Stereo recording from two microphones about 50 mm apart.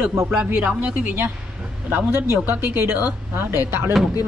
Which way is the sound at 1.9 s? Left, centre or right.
Right.